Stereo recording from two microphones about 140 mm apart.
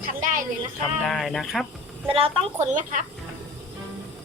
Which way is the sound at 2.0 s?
40° right (ahead or behind).